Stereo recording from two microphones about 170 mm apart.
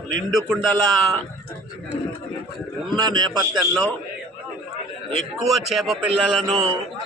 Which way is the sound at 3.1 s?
25° right (ahead or behind).